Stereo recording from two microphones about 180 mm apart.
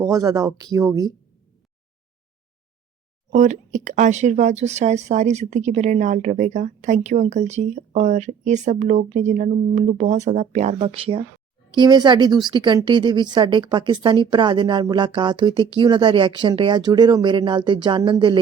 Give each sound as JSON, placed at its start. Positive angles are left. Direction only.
{"t": 0.0, "sound": "a woman's voice", "side_deg": -20}
{"t": 3.3, "sound": "a woman's voice", "side_deg": -40}